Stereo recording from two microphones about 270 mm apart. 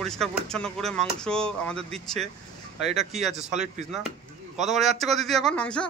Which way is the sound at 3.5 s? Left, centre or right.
Right.